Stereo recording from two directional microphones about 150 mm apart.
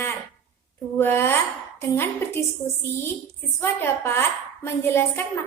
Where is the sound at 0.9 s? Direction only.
15° left (ahead or behind).